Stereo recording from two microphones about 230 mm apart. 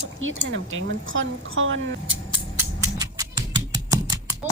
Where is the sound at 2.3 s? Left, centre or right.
Centre.